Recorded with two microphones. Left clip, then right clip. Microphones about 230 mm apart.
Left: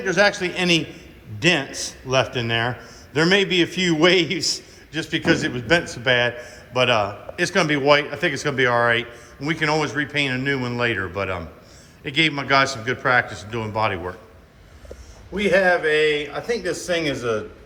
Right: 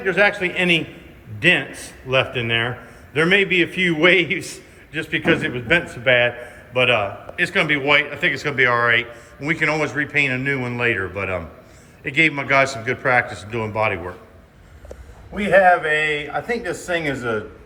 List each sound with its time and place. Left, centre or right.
0.0 s a man's voice: centre
16.6 s speech: centre